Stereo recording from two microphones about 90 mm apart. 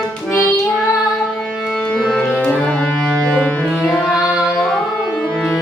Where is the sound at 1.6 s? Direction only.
10° left (ahead or behind).